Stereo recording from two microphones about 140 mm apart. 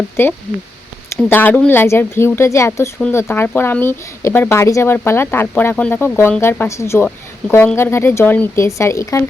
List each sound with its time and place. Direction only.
0.2 s speech: 15° left (ahead or behind)